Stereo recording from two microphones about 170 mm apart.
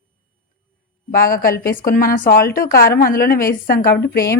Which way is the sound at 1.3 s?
60° left (ahead or behind).